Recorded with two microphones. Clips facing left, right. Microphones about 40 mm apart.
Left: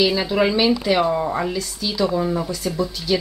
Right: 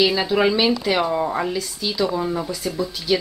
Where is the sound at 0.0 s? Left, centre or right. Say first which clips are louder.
Even; centre.